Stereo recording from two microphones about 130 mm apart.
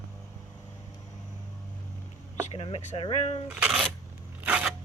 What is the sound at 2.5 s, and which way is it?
Speech, 50° left (ahead or behind).